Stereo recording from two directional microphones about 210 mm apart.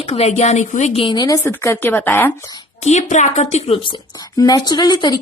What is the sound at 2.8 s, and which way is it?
A woman's voice, 35° left (ahead or behind).